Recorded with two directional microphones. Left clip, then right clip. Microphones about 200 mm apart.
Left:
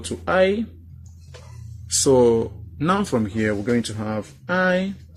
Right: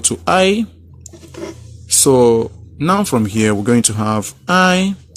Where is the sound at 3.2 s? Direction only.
45° right (ahead or behind).